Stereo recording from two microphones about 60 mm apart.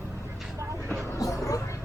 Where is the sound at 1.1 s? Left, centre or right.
Left.